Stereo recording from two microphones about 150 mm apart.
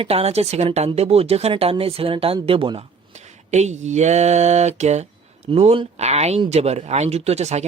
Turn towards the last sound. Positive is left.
turn(degrees=-45)  # may be behind; listen again after turning